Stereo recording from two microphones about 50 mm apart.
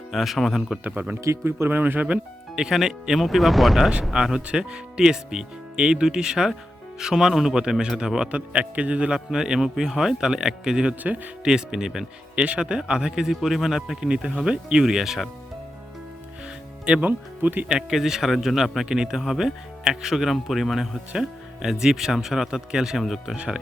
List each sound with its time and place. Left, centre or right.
0.1 s speech: centre
1.0 s speech: right
2.6 s speech: centre
4.1 s speech: centre
8.3 s a man's voice: right
9.3 s speech: centre
11.0 s speech: right
11.4 s speech: centre
12.4 s a man's voice: right
14.1 s speech: centre
16.8 s speech: right
17.1 s speech: right
17.7 s speech: centre